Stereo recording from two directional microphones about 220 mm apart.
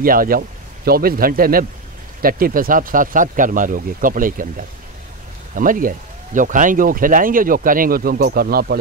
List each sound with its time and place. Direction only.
0.0 s speech: 40° right (ahead or behind)